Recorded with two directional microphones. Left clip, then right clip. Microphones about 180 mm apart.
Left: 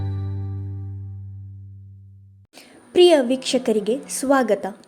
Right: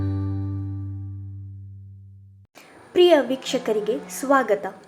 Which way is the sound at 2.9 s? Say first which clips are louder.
Left 2 dB; 35° left (ahead or behind).